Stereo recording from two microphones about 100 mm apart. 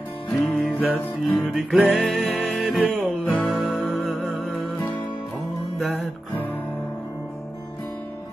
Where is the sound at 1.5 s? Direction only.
5° right (ahead or behind).